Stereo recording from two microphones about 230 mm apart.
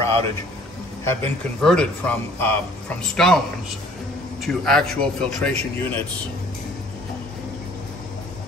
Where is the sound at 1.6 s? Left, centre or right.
Centre.